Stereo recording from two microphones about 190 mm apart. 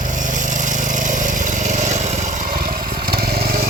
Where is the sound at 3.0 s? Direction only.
50° right (ahead or behind).